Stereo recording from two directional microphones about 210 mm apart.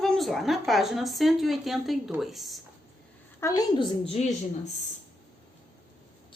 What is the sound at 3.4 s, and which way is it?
Speech, 15° left (ahead or behind).